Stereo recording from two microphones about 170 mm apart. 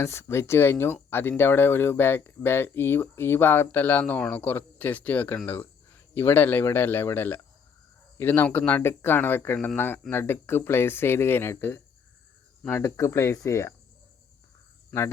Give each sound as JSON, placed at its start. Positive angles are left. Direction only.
{"t": 0.0, "sound": "speech", "side_deg": 15}
{"t": 14.8, "sound": "cricket", "side_deg": 15}